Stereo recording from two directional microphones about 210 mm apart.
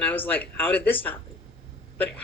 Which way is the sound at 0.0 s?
10° left (ahead or behind).